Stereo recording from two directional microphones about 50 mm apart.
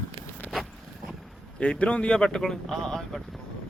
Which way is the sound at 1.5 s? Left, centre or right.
Left.